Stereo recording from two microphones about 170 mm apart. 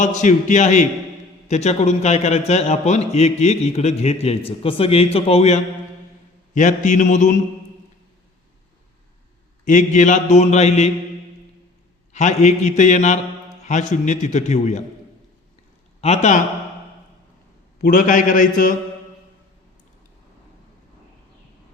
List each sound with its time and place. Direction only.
0.0 s a man's voice: 45° left (ahead or behind)
9.6 s a man's voice: 45° left (ahead or behind)
12.1 s a man's voice: 40° left (ahead or behind)
16.0 s a man's voice: 40° left (ahead or behind)
17.8 s a man's voice: 55° left (ahead or behind)